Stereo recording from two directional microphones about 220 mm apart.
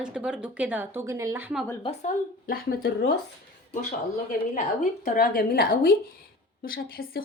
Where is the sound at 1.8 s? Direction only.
30° left (ahead or behind).